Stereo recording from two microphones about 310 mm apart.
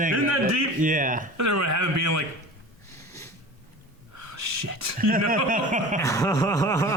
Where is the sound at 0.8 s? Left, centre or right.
Right.